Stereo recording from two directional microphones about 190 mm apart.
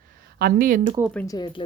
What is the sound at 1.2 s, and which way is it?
Speech, 20° left (ahead or behind).